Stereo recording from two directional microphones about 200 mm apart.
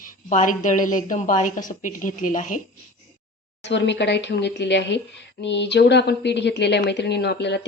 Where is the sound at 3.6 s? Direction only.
60° left (ahead or behind).